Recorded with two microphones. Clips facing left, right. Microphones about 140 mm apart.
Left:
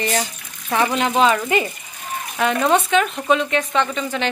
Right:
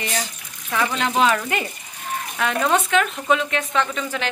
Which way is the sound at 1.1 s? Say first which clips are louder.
Left 3 dB; 5° left (ahead or behind).